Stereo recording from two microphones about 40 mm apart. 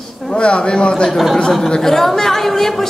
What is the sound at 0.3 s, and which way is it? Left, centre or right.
Speech, left.